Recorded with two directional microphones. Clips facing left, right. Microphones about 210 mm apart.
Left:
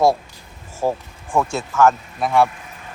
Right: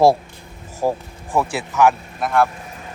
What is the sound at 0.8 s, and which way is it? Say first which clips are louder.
Speech: right 1 dB; 10° right (ahead or behind).